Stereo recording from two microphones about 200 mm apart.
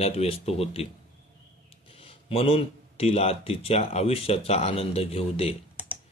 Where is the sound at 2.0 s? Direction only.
30° left (ahead or behind).